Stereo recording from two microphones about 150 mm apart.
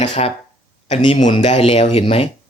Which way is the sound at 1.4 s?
45° left (ahead or behind).